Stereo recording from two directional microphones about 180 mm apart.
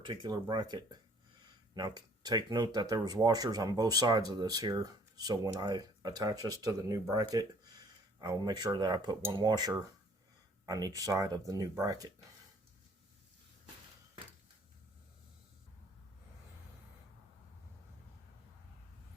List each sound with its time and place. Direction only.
0.0 s speech: 25° right (ahead or behind)